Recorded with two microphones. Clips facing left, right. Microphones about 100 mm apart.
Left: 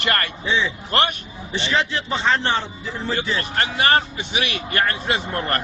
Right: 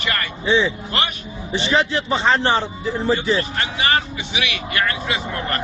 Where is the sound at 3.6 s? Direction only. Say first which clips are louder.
Left 2 dB; 45° left (ahead or behind).